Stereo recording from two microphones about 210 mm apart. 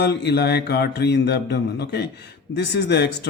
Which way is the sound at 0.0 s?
50° left (ahead or behind).